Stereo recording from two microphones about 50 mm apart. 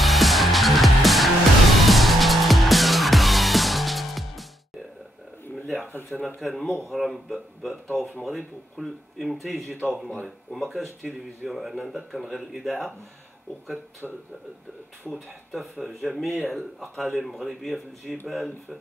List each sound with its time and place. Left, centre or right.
0.0 s music: centre
5.9 s a sound: left
6.2 s speech: centre
14.0 s speech: centre